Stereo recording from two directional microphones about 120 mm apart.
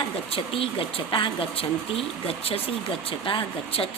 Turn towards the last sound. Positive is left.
turn(degrees=50)  # may be behind; listen again after turning